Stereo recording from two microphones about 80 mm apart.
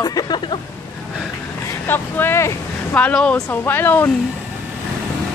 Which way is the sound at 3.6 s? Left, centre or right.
Left.